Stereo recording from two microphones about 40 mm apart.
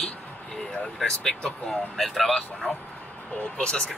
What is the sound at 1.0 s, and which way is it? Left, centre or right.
Speech, centre.